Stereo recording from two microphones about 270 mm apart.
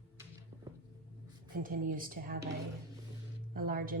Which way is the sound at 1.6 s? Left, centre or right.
Right.